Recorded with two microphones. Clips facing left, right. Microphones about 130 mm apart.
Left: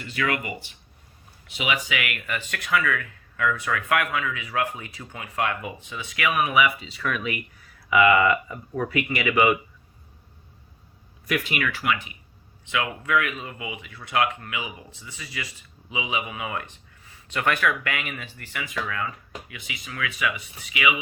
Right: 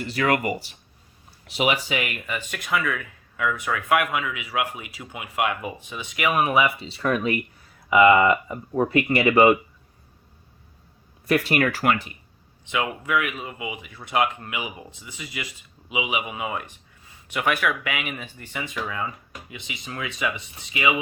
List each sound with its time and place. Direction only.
0.0 s speech: 40° right (ahead or behind)
2.1 s speech: 15° right (ahead or behind); by 9.6 s 35° right (ahead or behind)
11.3 s speech: 35° right (ahead or behind)
12.7 s speech: 20° right (ahead or behind)